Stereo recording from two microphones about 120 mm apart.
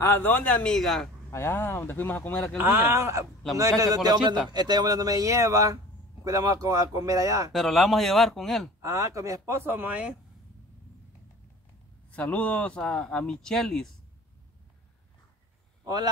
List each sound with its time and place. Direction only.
0.0 s speech: 20° left (ahead or behind)
1.3 s speech: 20° left (ahead or behind)
2.5 s a man's voice: 20° right (ahead or behind)
7.5 s speech: centre (ahead or behind)
8.8 s speech: 25° right (ahead or behind)
12.2 s speech: 10° left (ahead or behind)